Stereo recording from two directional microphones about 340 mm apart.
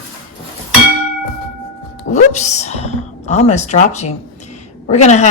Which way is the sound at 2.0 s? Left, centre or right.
Centre.